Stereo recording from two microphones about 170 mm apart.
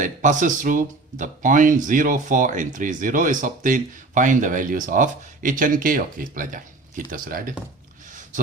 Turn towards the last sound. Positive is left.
turn(degrees=-55)  # may be behind; listen again after turning